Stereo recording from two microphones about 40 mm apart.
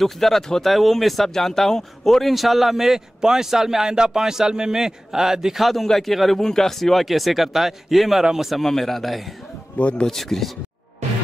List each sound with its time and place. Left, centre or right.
0.0 s speech: centre
5.6 s speech: centre
6.4 s speech: centre
8.6 s speech: centre
9.8 s speech: left
10.0 s speech: centre